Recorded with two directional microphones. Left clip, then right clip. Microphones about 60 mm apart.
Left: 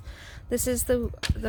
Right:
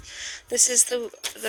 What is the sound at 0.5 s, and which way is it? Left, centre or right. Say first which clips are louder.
Speech: right 2 dB; left.